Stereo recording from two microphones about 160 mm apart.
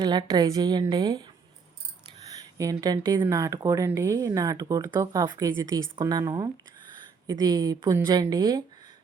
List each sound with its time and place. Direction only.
0.0 s speech: 25° right (ahead or behind)
2.6 s speech: 20° right (ahead or behind)